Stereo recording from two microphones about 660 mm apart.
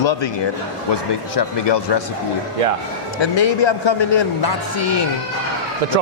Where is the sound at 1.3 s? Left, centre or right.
Left.